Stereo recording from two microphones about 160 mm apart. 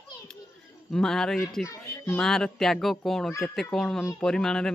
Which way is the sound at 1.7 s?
15° left (ahead or behind).